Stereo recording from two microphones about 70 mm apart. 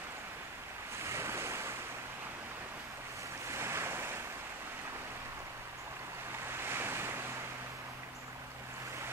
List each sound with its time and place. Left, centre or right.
1.0 s waves: right
3.5 s waves: right
6.6 s waves: right